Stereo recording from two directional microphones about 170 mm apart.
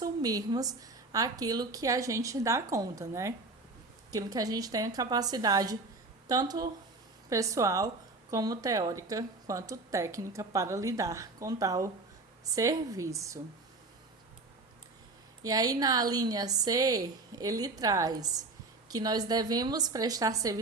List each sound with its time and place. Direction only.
0.0 s a woman's voice: 20° right (ahead or behind)
15.4 s a woman's voice: 20° right (ahead or behind)